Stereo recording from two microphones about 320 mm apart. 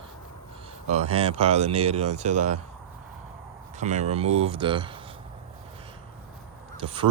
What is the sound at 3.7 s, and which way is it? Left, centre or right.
Speech, right.